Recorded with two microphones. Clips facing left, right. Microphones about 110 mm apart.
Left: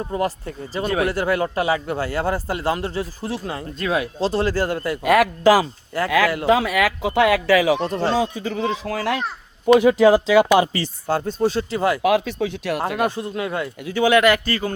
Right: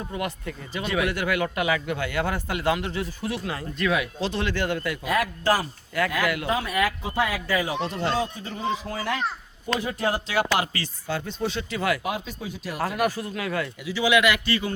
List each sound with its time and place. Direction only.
0.1 s speech: 35° left (ahead or behind)
5.0 s speech: 85° left
5.9 s speech: 30° left (ahead or behind)
6.4 s speech: 90° left
7.8 s speech: 40° left (ahead or behind)
8.1 s a man's voice: 90° left
11.1 s speech: 40° left (ahead or behind)
12.0 s speech: 80° left
13.0 s speech: 25° left (ahead or behind)
13.8 s a man's voice: 50° left (ahead or behind)